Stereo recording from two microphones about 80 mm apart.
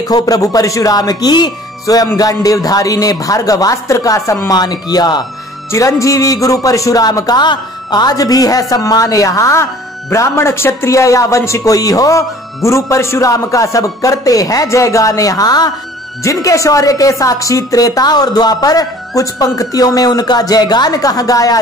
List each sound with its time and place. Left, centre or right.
0.1 s a man's voice: left
2.1 s a man's voice: left
4.5 s speech: left
5.7 s a man's voice: left
16.3 s a man's voice: left